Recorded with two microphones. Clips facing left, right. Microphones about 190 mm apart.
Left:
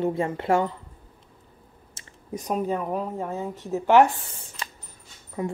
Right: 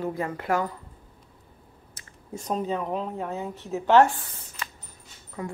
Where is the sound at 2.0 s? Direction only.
15° left (ahead or behind).